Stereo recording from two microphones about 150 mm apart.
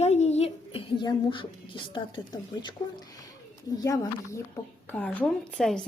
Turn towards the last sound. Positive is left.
turn(degrees=0)  # may be behind; listen again after turning